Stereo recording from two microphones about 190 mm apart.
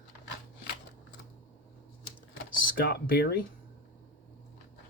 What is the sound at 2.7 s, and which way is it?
Speech, 50° left (ahead or behind).